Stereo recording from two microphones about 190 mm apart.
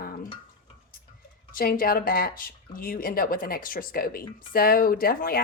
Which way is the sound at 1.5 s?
50° left (ahead or behind).